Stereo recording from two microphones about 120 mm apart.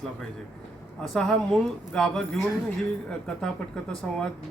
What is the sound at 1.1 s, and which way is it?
Speech, centre (ahead or behind).